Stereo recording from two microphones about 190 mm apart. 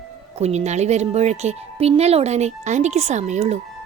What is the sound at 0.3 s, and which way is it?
Speech, 35° right (ahead or behind).